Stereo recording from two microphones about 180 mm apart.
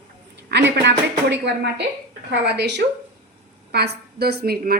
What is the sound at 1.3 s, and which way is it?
A woman's voice, 75° right (ahead or behind).